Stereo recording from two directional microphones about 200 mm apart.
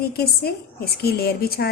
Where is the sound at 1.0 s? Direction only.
50° left (ahead or behind).